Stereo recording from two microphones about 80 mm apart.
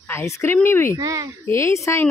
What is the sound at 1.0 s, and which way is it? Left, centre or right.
Speech, right.